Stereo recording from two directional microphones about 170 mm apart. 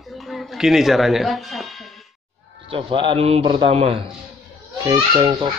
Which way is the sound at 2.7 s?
30° right (ahead or behind).